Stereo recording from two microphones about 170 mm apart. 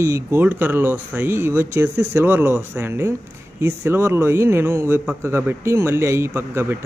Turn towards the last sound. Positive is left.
turn(degrees=-15)  # may be behind; listen again after turning